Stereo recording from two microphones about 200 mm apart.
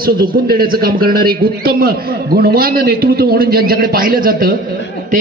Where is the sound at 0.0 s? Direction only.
50° right (ahead or behind).